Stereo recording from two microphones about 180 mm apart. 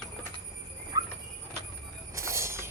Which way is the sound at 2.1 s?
15° right (ahead or behind).